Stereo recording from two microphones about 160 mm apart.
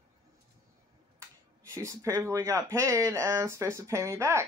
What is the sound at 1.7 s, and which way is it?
Speech, 20° right (ahead or behind).